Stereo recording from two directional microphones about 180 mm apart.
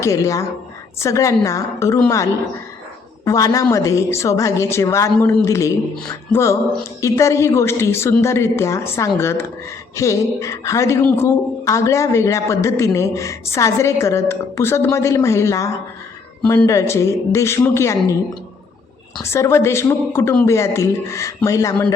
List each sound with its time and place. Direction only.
0.0 s speech: 15° left (ahead or behind)
19.2 s speech: 15° left (ahead or behind)